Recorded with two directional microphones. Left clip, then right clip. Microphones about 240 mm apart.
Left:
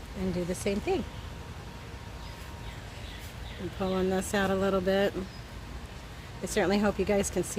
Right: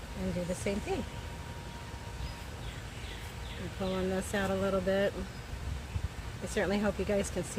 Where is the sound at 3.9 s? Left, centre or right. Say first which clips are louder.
Left 5 dB; left.